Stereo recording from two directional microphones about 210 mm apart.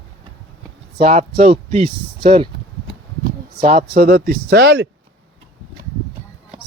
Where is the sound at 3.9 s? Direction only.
45° right (ahead or behind).